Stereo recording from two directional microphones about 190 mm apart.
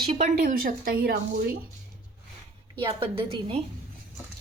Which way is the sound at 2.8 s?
25° right (ahead or behind).